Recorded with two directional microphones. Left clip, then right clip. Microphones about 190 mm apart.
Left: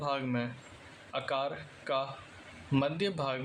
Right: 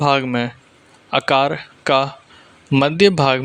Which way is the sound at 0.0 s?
50° right (ahead or behind).